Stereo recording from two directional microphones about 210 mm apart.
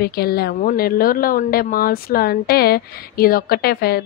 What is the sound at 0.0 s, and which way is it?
Speech, 45° left (ahead or behind).